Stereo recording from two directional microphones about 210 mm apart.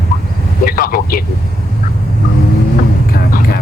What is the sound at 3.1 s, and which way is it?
Music, 45° left (ahead or behind).